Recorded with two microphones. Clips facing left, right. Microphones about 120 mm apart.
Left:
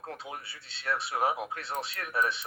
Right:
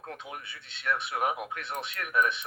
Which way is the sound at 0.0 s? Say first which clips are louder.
Left 1 dB; 35° left (ahead or behind).